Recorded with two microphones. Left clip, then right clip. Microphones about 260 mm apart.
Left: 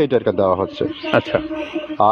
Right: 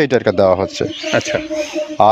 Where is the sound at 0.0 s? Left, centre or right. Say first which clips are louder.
Right 3 dB; right.